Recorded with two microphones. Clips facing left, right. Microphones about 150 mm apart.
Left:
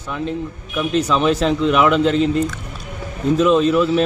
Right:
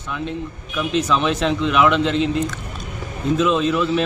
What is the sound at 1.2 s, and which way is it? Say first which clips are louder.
Speech: left 3 dB; 40° left (ahead or behind).